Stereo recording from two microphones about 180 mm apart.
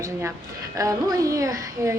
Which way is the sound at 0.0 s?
15° right (ahead or behind).